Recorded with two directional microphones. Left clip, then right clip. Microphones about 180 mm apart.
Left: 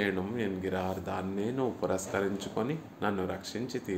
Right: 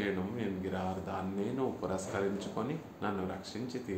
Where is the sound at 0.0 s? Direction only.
50° left (ahead or behind).